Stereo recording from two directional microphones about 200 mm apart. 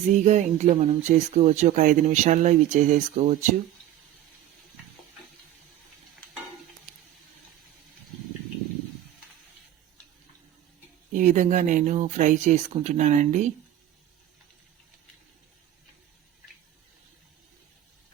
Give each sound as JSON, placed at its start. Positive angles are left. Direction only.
{"t": 0.2, "sound": "speech", "side_deg": -35}
{"t": 11.1, "sound": "speech", "side_deg": -40}